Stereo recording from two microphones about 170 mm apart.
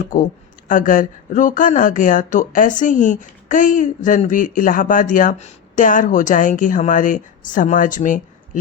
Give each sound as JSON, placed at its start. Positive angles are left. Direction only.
{"t": 0.0, "sound": "speech", "side_deg": 50}